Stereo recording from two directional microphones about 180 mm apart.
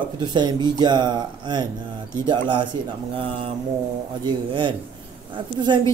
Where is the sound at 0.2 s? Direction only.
25° right (ahead or behind).